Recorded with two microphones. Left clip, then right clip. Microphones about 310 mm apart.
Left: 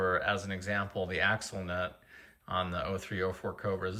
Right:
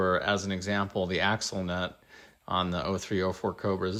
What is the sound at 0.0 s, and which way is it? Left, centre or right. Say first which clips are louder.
Speech: right 3 dB; centre.